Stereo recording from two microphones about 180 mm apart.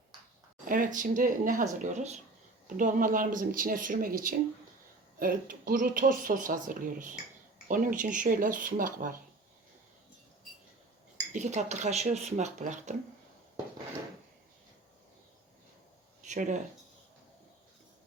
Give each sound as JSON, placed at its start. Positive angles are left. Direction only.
{"t": 0.7, "sound": "speech", "side_deg": -50}
{"t": 11.3, "sound": "speech", "side_deg": -40}
{"t": 16.2, "sound": "speech", "side_deg": -40}